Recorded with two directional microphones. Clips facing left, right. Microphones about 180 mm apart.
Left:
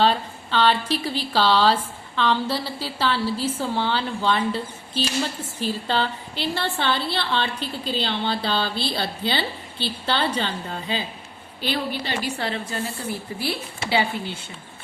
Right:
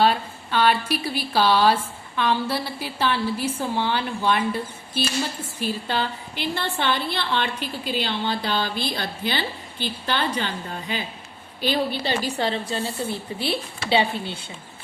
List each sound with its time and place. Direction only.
0.0 s speech: 10° right (ahead or behind)
11.9 s a woman's voice: 30° right (ahead or behind)